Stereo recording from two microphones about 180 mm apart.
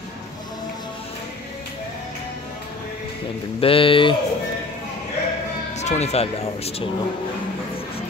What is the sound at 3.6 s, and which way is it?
Speech, 30° left (ahead or behind).